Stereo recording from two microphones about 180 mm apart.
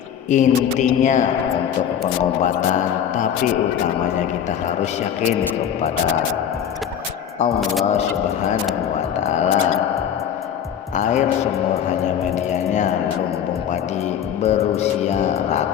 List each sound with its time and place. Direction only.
0.3 s speech: 40° left (ahead or behind)
2.4 s speech: 40° left (ahead or behind)
9.2 s speech: 40° left (ahead or behind)
10.9 s speech: 40° left (ahead or behind)
14.4 s speech: 35° left (ahead or behind)